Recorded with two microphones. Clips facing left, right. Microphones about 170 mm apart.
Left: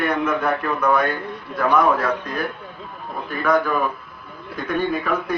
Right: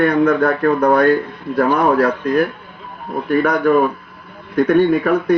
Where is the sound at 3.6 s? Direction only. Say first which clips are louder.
Right 9 dB; 60° right (ahead or behind).